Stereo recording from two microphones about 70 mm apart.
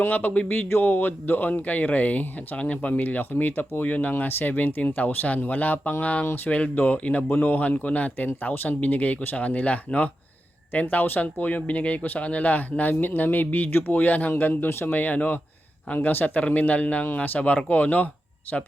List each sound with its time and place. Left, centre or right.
0.0 s speech: left